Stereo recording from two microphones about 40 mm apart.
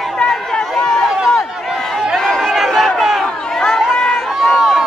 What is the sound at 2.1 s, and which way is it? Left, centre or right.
Chatter, centre.